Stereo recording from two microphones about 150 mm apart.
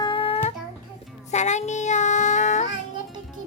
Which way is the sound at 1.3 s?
50° left (ahead or behind).